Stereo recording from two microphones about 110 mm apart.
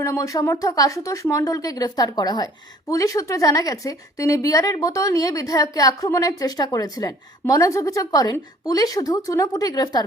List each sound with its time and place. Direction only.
0.0 s speech: 30° left (ahead or behind)